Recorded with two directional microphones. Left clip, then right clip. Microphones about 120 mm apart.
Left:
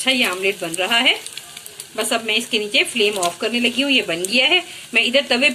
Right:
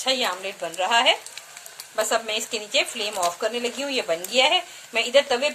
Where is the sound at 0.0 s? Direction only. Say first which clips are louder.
Left 6 dB; 60° right (ahead or behind).